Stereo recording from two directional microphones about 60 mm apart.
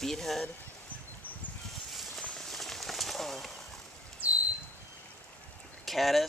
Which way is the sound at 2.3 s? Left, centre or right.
Centre.